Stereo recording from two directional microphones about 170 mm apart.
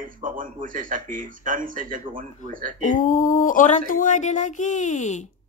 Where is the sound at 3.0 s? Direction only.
50° left (ahead or behind).